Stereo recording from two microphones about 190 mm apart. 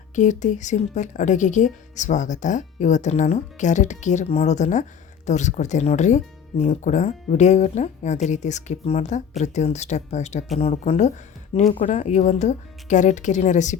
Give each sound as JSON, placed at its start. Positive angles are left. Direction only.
{"t": 0.2, "sound": "speech", "side_deg": 40}